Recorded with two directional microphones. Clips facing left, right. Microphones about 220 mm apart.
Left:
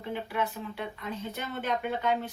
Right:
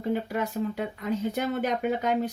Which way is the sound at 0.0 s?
40° right (ahead or behind).